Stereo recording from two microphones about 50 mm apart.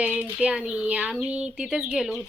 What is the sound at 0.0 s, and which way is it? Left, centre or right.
Speech, right.